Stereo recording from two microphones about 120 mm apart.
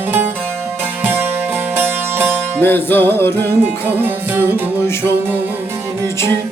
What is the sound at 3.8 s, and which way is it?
Music, 15° right (ahead or behind).